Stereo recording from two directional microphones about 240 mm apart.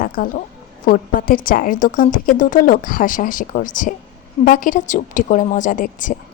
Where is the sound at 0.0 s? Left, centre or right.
Left.